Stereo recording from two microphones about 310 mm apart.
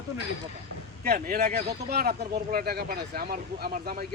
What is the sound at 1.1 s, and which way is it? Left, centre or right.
Speech, right.